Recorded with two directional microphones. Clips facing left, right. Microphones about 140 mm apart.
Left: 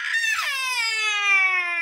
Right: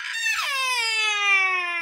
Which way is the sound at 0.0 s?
25° right (ahead or behind).